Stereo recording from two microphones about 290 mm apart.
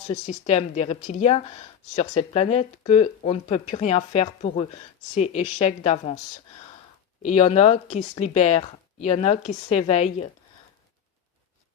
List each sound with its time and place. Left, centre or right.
0.1 s speech: left
7.2 s speech: left